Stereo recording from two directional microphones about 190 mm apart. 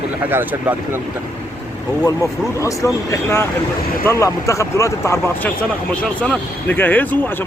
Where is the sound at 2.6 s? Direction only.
15° left (ahead or behind).